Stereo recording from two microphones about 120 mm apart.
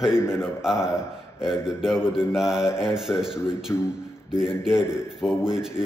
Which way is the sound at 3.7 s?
20° left (ahead or behind).